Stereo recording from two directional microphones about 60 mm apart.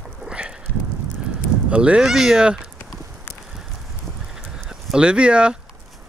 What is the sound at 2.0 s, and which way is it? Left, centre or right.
Speech, centre.